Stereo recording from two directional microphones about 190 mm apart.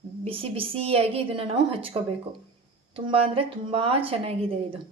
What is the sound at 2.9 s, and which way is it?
Speech, 30° right (ahead or behind).